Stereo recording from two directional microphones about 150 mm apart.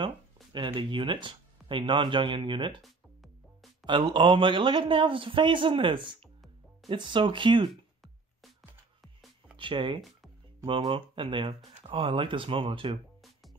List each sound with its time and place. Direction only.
0.0 s speech: 30° right (ahead or behind)
2.8 s music: centre (ahead or behind)
3.8 s a man's voice: 30° right (ahead or behind)
7.7 s music: centre (ahead or behind)
9.6 s a man's voice: 35° right (ahead or behind)